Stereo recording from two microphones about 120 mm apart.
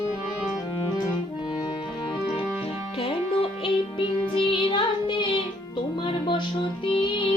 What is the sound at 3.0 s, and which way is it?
Music, 50° left (ahead or behind).